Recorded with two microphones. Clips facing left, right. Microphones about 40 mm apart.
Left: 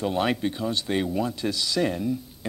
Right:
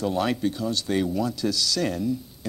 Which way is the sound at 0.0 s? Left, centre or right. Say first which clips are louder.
Even; left.